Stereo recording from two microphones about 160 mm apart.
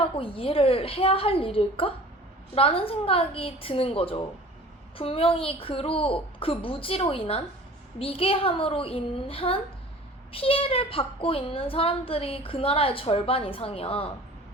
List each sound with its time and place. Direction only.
0.0 s a child's voice: 35° left (ahead or behind)